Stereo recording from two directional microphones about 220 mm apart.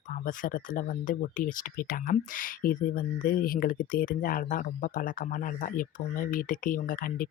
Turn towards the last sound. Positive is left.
turn(degrees=40)  # may be behind; listen again after turning